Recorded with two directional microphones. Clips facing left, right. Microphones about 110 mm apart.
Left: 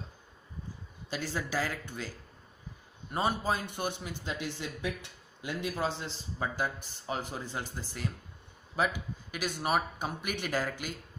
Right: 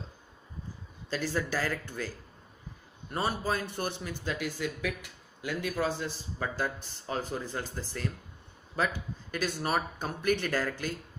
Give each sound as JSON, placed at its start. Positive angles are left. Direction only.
{"t": 1.1, "sound": "speech", "side_deg": 15}
{"t": 3.1, "sound": "speech", "side_deg": 20}